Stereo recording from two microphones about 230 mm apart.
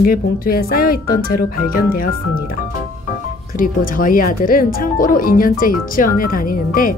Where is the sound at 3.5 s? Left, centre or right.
Left.